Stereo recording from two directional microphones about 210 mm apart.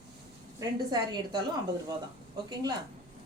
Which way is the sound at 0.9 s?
20° right (ahead or behind).